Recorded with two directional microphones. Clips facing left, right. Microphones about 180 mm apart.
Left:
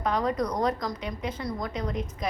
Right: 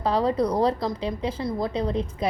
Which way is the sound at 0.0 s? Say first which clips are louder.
Right 4 dB; 30° right (ahead or behind).